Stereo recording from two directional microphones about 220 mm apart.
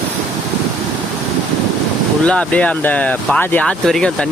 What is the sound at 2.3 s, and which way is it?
Speech, 5° left (ahead or behind).